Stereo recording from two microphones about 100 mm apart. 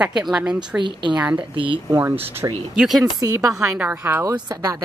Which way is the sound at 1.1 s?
15° right (ahead or behind).